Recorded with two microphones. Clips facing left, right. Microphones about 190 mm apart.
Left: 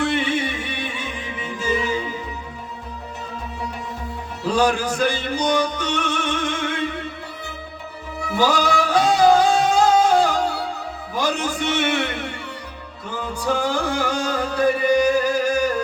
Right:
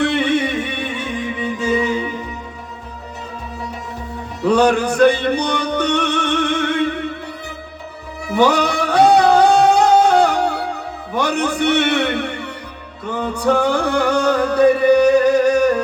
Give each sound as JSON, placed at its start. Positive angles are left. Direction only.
{"t": 0.0, "sound": "music", "side_deg": -65}
{"t": 4.4, "sound": "music", "side_deg": -65}
{"t": 8.4, "sound": "music", "side_deg": -65}